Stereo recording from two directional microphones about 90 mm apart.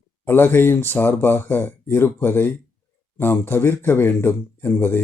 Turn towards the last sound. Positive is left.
turn(degrees=20)  # may be behind; listen again after turning